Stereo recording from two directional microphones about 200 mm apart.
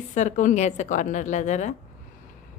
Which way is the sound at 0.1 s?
40° left (ahead or behind).